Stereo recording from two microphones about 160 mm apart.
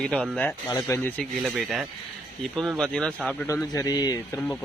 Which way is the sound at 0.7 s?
25° left (ahead or behind).